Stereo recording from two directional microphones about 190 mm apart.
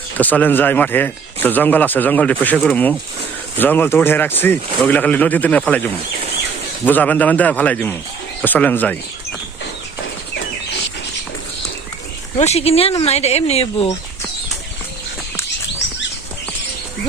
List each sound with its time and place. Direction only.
0.2 s speech: 10° left (ahead or behind)
12.4 s speech: 35° left (ahead or behind)